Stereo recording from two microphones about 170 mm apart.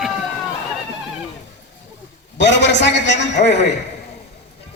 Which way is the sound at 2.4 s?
90° left.